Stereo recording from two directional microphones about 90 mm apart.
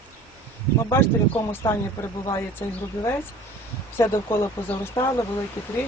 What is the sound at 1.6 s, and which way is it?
Speech, 45° left (ahead or behind).